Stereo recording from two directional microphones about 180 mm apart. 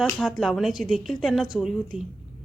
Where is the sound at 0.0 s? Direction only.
5° left (ahead or behind).